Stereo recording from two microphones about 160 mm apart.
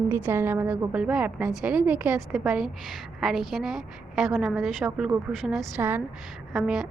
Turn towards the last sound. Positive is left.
turn(degrees=0)  # may be behind; listen again after turning